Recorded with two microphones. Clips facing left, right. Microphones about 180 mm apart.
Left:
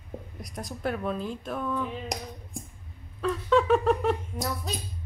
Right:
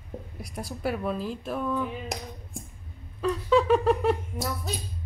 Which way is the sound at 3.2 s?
5° right (ahead or behind).